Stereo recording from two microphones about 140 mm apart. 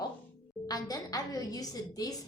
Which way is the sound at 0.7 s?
25° left (ahead or behind).